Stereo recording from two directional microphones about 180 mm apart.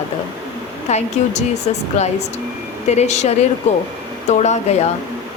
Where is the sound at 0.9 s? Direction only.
40° left (ahead or behind).